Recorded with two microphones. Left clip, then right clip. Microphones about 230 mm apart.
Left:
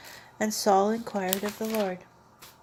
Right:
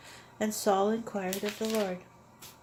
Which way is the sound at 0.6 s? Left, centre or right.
Left.